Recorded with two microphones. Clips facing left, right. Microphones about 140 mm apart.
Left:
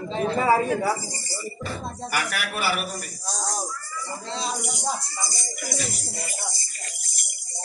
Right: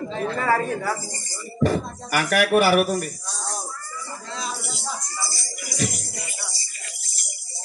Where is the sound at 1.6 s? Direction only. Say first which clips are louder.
Right 13 dB; 45° right (ahead or behind).